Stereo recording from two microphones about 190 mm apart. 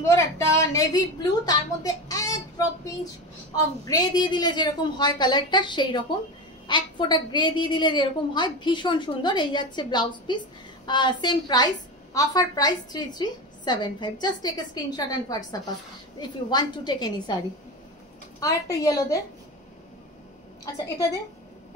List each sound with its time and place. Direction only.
0.0 s a woman's voice: 15° left (ahead or behind)
18.4 s a woman's voice: 20° left (ahead or behind)
20.6 s a woman's voice: 20° left (ahead or behind)